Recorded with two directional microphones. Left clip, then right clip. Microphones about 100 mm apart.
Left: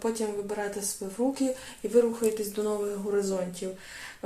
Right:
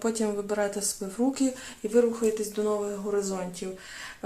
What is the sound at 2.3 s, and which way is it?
Speech, 5° right (ahead or behind).